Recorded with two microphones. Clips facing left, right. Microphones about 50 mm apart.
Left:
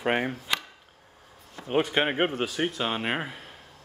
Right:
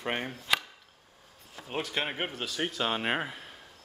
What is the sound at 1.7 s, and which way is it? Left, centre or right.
Speech, left.